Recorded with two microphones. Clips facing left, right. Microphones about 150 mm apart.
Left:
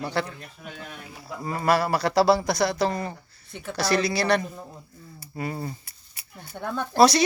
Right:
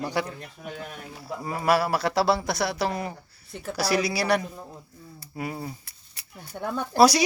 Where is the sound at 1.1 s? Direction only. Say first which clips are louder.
Left 1 dB; 5° right (ahead or behind).